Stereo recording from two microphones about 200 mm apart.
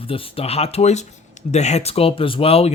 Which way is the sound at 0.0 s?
25° left (ahead or behind).